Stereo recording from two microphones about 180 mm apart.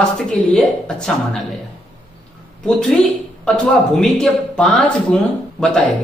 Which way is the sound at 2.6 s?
5° left (ahead or behind).